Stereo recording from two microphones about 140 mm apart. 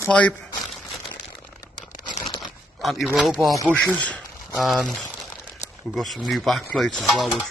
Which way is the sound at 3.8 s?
10° left (ahead or behind).